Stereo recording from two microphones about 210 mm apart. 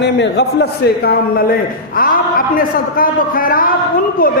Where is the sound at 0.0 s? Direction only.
55° left (ahead or behind).